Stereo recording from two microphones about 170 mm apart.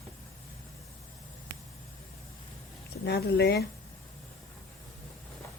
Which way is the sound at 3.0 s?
75° left (ahead or behind).